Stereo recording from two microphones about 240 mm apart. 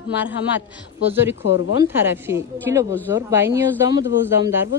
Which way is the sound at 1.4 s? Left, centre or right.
Left.